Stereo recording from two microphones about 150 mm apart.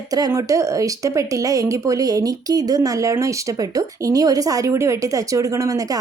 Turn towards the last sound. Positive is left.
turn(degrees=-20)  # may be behind; listen again after turning